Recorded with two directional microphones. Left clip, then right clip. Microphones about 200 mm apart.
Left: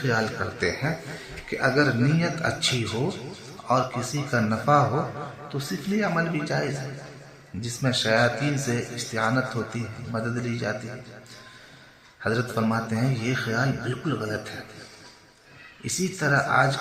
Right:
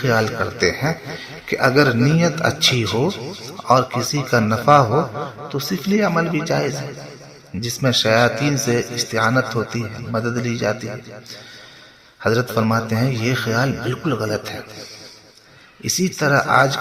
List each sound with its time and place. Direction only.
0.0 s speech: 40° right (ahead or behind)
12.2 s speech: 40° right (ahead or behind)
16.1 s speech: 40° right (ahead or behind)